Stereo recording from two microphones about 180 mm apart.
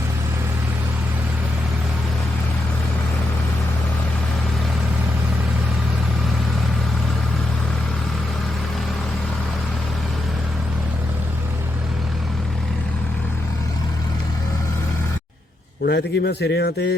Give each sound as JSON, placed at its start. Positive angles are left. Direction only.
{"t": 15.9, "sound": "a man's voice", "side_deg": 70}